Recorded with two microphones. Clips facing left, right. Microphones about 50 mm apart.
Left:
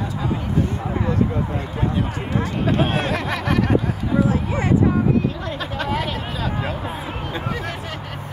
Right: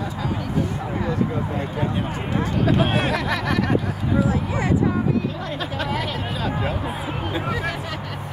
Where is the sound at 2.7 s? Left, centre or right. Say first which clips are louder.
Even; left.